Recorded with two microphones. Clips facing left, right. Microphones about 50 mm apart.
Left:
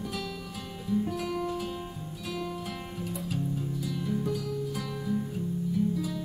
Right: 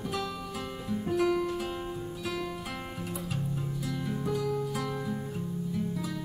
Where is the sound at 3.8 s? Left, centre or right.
Centre.